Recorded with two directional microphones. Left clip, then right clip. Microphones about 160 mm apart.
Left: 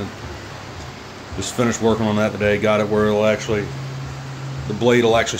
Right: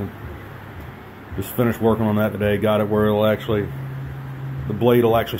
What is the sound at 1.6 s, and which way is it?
Speech, 5° right (ahead or behind).